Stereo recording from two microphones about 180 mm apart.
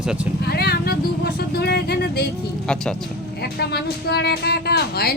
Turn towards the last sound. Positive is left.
turn(degrees=60)  # may be behind; listen again after turning